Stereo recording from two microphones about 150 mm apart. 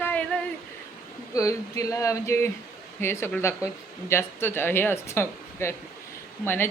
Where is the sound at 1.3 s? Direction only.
20° left (ahead or behind).